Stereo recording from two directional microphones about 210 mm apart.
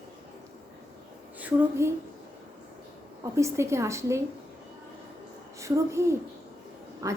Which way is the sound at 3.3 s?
15° right (ahead or behind).